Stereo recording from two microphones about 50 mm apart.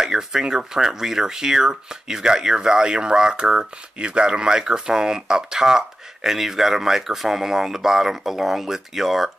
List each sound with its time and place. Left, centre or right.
0.0 s speech: centre